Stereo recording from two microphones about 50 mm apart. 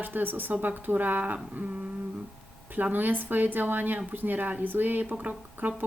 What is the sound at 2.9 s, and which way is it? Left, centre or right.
Speech, right.